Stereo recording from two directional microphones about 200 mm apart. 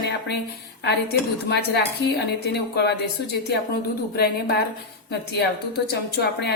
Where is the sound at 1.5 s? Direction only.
55° left (ahead or behind).